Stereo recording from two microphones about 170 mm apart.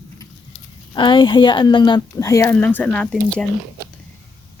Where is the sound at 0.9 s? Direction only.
25° left (ahead or behind); by 3.4 s 5° left (ahead or behind).